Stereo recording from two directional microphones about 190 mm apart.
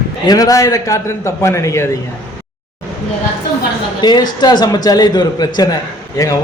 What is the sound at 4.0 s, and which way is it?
A man's voice, 20° left (ahead or behind).